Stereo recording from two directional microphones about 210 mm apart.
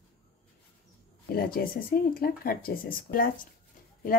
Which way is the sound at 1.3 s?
45° left (ahead or behind).